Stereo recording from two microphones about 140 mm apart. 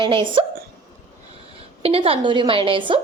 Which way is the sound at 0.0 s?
35° right (ahead or behind).